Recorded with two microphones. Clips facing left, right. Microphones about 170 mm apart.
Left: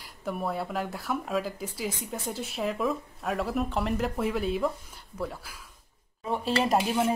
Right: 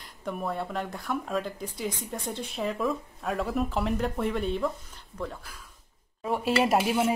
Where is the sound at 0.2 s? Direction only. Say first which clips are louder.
Left 1 dB; 5° left (ahead or behind).